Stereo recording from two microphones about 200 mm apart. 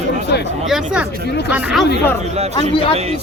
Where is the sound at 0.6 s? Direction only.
Centre (ahead or behind).